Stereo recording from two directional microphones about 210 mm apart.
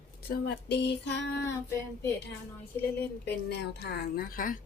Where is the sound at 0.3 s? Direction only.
50° left (ahead or behind).